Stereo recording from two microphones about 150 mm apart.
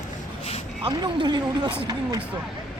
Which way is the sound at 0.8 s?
30° right (ahead or behind).